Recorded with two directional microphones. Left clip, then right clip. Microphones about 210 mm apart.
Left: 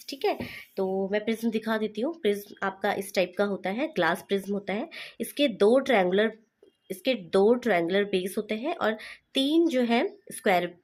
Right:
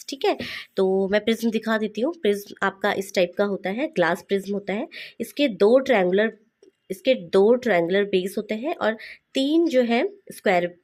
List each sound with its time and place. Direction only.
0.1 s speech: 30° right (ahead or behind)